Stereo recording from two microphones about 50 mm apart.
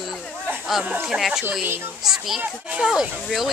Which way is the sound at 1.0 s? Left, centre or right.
Centre.